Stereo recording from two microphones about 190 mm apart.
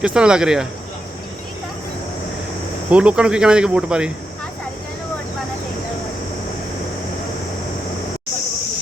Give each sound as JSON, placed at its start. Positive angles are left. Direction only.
{"t": 0.0, "sound": "speech", "side_deg": -5}
{"t": 2.9, "sound": "speech", "side_deg": -5}